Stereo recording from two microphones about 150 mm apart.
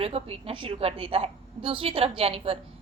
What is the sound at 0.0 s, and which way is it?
A woman's voice, 40° right (ahead or behind).